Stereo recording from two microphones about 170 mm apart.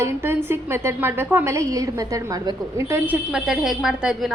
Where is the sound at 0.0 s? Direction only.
15° right (ahead or behind).